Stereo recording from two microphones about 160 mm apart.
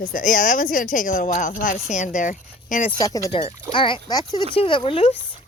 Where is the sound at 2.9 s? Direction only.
25° left (ahead or behind).